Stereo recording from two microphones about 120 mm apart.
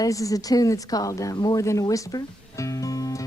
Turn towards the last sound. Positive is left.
turn(degrees=30)  # may be behind; listen again after turning